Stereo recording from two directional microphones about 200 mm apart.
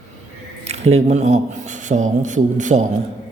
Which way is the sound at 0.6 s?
30° right (ahead or behind).